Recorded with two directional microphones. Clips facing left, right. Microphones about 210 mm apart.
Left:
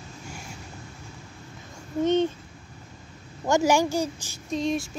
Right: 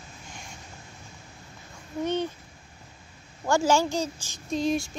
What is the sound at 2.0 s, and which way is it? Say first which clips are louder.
Speech: left 6 dB; 20° left (ahead or behind).